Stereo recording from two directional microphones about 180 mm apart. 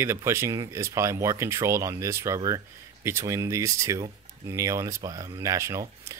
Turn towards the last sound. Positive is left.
turn(degrees=-15)  # may be behind; listen again after turning